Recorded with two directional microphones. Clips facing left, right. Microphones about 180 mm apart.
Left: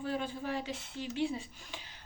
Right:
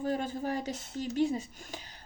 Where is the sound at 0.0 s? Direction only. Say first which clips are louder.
Right 4 dB; 45° right (ahead or behind).